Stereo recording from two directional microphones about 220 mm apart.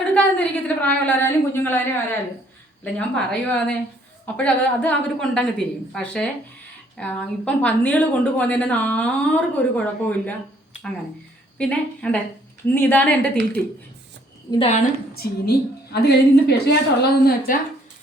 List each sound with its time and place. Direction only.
0.0 s a woman's voice: 5° left (ahead or behind)
12.0 s a woman's voice: 5° left (ahead or behind)
14.5 s a woman's voice: 25° left (ahead or behind)
15.2 s a woman's voice: 45° left (ahead or behind)